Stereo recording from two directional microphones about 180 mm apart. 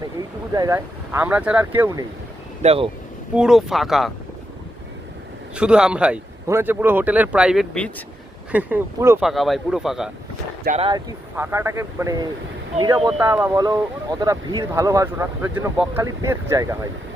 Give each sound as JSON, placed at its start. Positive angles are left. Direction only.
{"t": 0.5, "sound": "speech", "side_deg": -20}
{"t": 2.6, "sound": "speech", "side_deg": -35}
{"t": 3.3, "sound": "speech", "side_deg": 0}
{"t": 5.5, "sound": "speech", "side_deg": -5}
{"t": 8.5, "sound": "speech", "side_deg": -10}
{"t": 9.2, "sound": "speech", "side_deg": 0}
{"t": 10.8, "sound": "speech", "side_deg": -30}
{"t": 11.3, "sound": "speech", "side_deg": -15}